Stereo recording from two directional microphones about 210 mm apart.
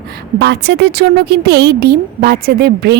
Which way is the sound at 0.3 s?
50° right (ahead or behind).